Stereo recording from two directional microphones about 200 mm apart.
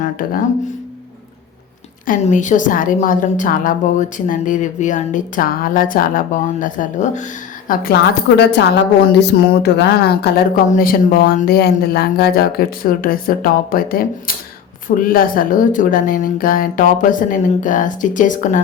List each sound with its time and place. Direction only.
0.0 s speech: 45° left (ahead or behind)
2.0 s a woman's voice: 40° left (ahead or behind)
8.4 s a woman's voice: 60° left (ahead or behind)
10.7 s a woman's voice: 45° left (ahead or behind)